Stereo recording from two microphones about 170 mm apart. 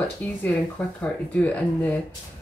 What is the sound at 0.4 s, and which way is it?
Speech, 10° left (ahead or behind).